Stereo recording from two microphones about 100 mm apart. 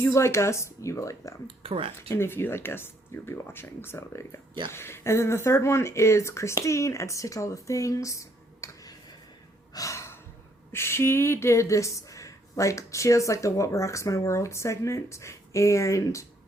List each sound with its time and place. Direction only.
0.0 s speech: 25° left (ahead or behind)
1.5 s speech: 70° right (ahead or behind)
2.0 s speech: 25° left (ahead or behind)
9.7 s gasp: 30° left (ahead or behind)
10.7 s speech: 25° left (ahead or behind)